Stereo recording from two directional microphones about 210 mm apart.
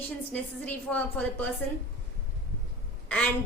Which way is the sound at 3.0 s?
5° left (ahead or behind).